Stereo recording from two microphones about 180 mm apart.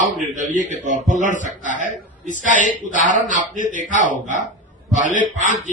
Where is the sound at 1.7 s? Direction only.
45° left (ahead or behind).